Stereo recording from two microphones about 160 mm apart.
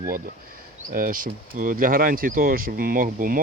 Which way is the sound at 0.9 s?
60° right (ahead or behind).